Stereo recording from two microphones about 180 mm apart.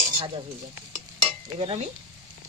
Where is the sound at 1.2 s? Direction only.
30° right (ahead or behind).